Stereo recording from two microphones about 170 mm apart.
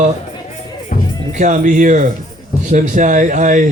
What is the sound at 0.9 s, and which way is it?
Music, 50° left (ahead or behind).